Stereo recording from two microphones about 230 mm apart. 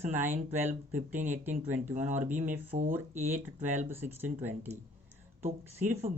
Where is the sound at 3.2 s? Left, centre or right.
Centre.